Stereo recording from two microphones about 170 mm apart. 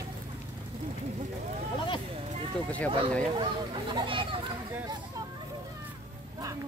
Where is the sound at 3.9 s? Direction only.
30° right (ahead or behind).